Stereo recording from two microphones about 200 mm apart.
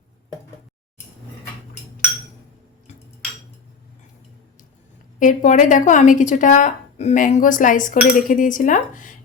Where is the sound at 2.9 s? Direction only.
35° left (ahead or behind).